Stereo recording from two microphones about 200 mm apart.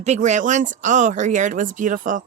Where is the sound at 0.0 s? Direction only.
35° right (ahead or behind).